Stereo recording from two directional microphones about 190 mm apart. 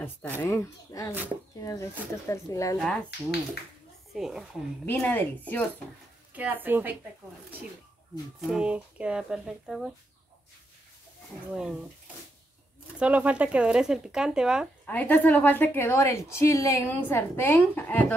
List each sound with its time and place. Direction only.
0.4 s a woman's voice: 15° left (ahead or behind)
4.1 s speech: centre (ahead or behind)
4.8 s a woman's voice: 10° left (ahead or behind)
6.3 s a woman's voice: 10° right (ahead or behind)
8.4 s speech: centre (ahead or behind)
11.5 s speech: 5° right (ahead or behind)
13.0 s speech: 5° right (ahead or behind)
14.9 s a woman's voice: 10° left (ahead or behind)